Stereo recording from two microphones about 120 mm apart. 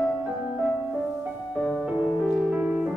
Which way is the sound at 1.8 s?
5° right (ahead or behind).